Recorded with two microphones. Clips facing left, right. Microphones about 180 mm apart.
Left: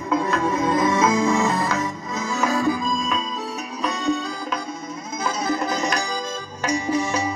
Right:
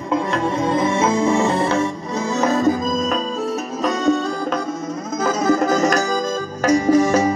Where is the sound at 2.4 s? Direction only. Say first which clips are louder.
Right 4 dB; 40° right (ahead or behind).